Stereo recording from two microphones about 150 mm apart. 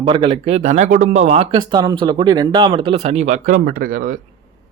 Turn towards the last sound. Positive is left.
turn(degrees=-65)  # may be behind; listen again after turning